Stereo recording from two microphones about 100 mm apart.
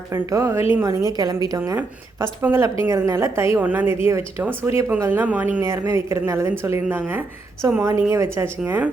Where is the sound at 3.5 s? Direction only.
20° right (ahead or behind).